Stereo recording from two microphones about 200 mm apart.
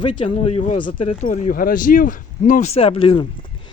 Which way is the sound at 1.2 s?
40° left (ahead or behind).